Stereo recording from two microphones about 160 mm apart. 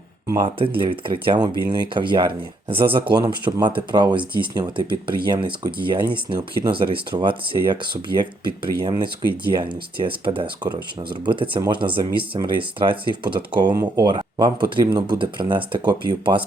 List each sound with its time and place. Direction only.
0.4 s speech: 35° right (ahead or behind)